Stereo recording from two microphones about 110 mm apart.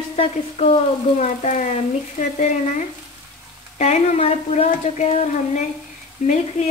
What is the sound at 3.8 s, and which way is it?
Speech, 80° left.